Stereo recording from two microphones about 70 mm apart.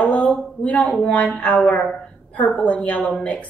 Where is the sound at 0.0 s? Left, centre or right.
Centre.